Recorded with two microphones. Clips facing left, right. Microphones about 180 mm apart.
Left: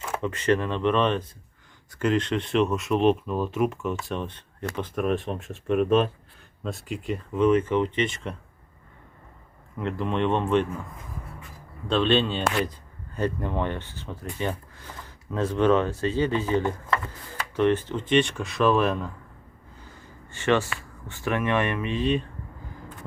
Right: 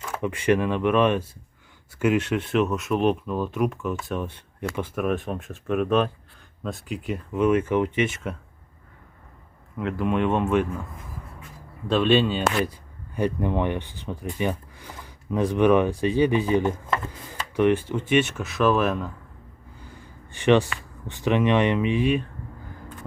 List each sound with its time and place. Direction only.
0.2 s speech: 10° right (ahead or behind)
9.7 s speech: 5° right (ahead or behind)
11.9 s speech: 5° right (ahead or behind)
20.3 s speech: 15° right (ahead or behind)